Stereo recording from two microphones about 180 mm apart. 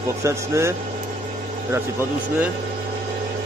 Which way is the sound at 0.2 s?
15° right (ahead or behind).